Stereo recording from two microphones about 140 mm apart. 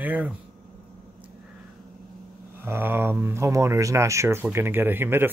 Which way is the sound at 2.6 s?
15° right (ahead or behind).